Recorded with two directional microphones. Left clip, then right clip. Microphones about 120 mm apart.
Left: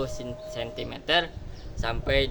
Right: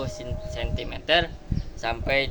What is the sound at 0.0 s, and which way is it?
A man's voice, 35° left (ahead or behind).